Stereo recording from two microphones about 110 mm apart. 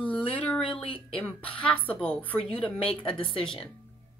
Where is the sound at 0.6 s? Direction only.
55° left (ahead or behind).